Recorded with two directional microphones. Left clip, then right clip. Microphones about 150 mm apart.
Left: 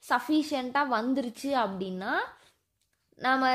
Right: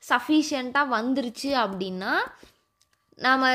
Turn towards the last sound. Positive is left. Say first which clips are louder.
# right 4 dB
turn(degrees=-15)  # may be behind; listen again after turning